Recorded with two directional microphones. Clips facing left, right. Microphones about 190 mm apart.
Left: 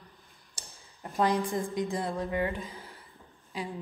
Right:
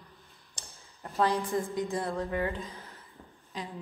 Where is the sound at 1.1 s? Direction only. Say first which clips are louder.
Even; 15° left (ahead or behind).